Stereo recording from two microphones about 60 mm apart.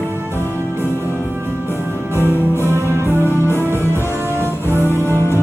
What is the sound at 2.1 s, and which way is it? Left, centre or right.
Music, right.